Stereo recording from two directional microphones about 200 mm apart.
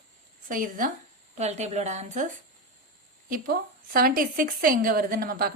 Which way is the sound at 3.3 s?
45° right (ahead or behind).